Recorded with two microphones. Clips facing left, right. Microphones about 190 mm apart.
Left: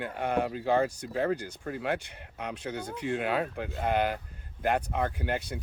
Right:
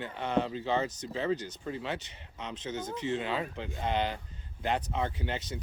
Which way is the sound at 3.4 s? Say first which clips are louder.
Left 4 dB; 55° left (ahead or behind).